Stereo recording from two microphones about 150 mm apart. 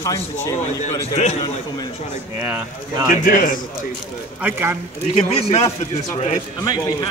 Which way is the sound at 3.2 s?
65° left (ahead or behind).